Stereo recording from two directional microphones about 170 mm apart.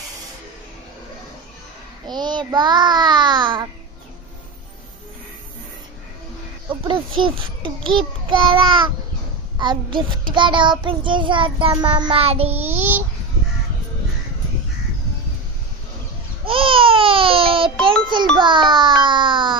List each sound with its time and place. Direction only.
2.0 s child singing: 25° right (ahead or behind)
6.7 s a child's voice: 30° right (ahead or behind)
8.3 s child singing: 30° right (ahead or behind)
16.4 s babbling: 30° right (ahead or behind)
18.1 s music: 30° right (ahead or behind)